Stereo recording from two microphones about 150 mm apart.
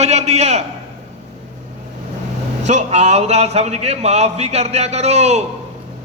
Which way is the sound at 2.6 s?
50° right (ahead or behind).